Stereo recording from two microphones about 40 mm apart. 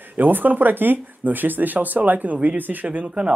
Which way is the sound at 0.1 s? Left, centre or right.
Right.